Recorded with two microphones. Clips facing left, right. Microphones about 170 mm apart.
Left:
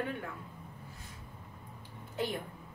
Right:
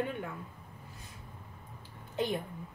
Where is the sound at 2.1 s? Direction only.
20° right (ahead or behind).